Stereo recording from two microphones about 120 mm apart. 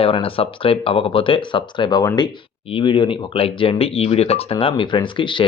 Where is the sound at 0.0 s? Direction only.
50° left (ahead or behind).